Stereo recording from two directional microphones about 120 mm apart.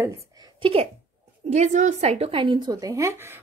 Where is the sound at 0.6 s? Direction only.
55° right (ahead or behind).